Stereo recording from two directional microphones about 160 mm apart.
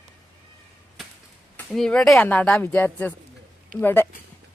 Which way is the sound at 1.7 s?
5° left (ahead or behind).